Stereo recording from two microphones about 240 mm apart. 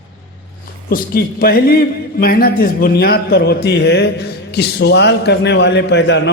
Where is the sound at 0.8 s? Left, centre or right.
Left.